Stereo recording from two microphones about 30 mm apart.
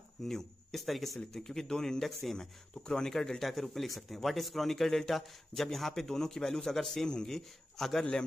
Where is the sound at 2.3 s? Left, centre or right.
Left.